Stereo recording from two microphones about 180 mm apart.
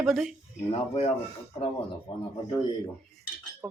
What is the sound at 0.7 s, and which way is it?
Speech, 35° left (ahead or behind).